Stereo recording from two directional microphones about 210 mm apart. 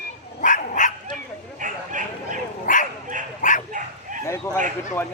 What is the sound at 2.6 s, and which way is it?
Dog, 40° left (ahead or behind).